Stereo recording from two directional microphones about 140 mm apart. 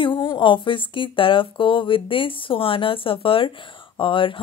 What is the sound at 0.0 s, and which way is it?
Speech, 35° left (ahead or behind).